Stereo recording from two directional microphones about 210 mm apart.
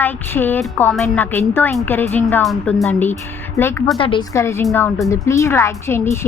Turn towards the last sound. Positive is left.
turn(degrees=10)  # may be behind; listen again after turning